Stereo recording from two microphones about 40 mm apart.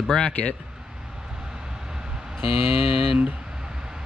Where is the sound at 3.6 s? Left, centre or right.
Right.